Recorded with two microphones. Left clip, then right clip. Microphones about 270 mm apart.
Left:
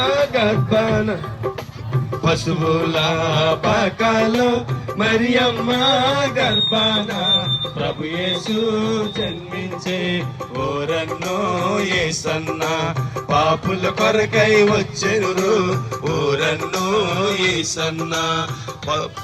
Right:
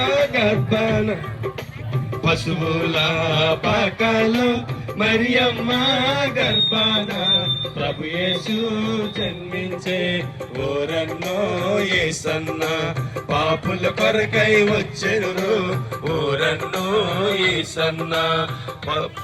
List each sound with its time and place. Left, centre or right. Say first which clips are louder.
0.0 s music: left 1 dB; left
2.2 s music: left 2 dB; left; by 18.4 s centre